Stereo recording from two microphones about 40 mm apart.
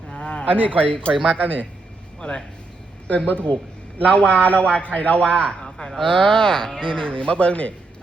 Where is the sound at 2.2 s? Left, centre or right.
Left.